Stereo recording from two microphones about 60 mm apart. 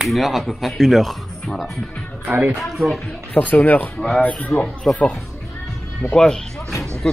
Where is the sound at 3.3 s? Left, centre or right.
Left.